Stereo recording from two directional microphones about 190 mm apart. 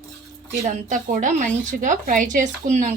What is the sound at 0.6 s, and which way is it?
Speech, 40° right (ahead or behind).